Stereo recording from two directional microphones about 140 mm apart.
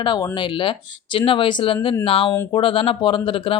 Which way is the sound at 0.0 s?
35° left (ahead or behind).